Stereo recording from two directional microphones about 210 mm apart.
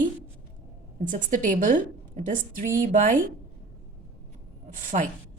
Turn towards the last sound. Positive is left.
turn(degrees=-40)  # may be behind; listen again after turning